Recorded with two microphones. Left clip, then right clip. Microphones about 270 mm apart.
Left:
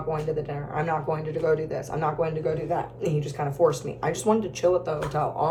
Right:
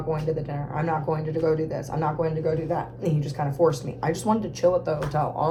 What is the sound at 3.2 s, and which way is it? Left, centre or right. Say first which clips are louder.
Speech: even; centre.